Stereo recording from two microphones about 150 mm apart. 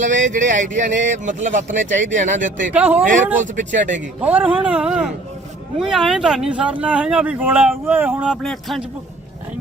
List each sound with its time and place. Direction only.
0.0 s speech: 55° right (ahead or behind)
2.7 s speech: 10° right (ahead or behind)
3.4 s speech: 55° right (ahead or behind)
4.2 s speech: 10° right (ahead or behind)